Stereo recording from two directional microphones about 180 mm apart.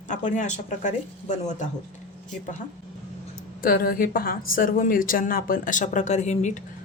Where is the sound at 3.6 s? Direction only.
55° left (ahead or behind).